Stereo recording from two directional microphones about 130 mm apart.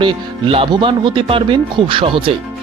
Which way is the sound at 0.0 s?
40° right (ahead or behind).